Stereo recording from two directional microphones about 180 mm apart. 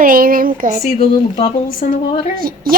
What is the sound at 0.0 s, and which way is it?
Speech, 50° right (ahead or behind).